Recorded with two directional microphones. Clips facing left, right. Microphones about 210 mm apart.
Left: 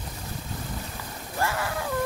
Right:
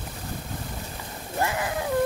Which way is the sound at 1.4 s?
20° right (ahead or behind).